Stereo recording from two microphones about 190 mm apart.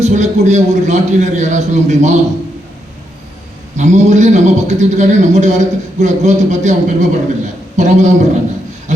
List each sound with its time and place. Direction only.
0.0 s a man's voice: 40° right (ahead or behind)
3.8 s a man's voice: 40° right (ahead or behind)